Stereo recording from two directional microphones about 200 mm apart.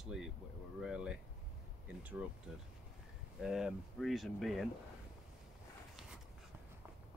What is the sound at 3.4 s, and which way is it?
Speech, centre (ahead or behind).